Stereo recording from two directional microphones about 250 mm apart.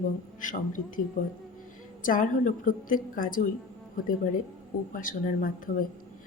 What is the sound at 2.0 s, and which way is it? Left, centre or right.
Speech, left.